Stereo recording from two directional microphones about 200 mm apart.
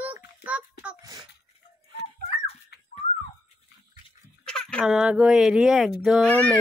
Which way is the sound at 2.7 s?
50° left (ahead or behind).